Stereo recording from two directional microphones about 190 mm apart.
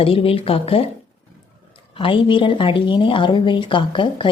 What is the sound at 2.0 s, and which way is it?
A woman's voice, 25° left (ahead or behind).